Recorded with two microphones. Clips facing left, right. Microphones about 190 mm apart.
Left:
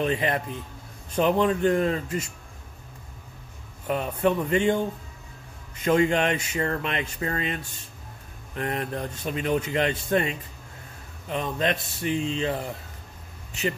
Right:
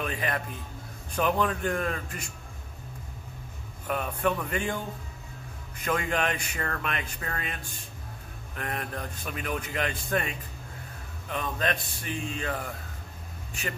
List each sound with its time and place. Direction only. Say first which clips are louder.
0.0 s a man's voice: left 6 dB; 25° left (ahead or behind)
3.8 s a man's voice: left 4 dB; 25° left (ahead or behind)
5.9 s a man's voice: left 7 dB; 25° left (ahead or behind)
8.5 s a man's voice: left 6 dB; 25° left (ahead or behind)